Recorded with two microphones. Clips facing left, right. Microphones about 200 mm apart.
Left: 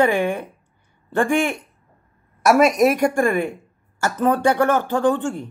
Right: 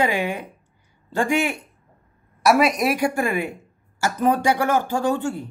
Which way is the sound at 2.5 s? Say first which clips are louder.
Left 3 dB; 45° left (ahead or behind).